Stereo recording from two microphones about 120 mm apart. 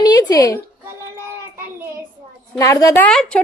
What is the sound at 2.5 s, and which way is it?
Speech, 25° left (ahead or behind).